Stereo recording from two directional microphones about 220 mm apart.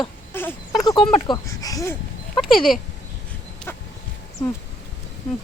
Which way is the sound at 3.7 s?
10° left (ahead or behind).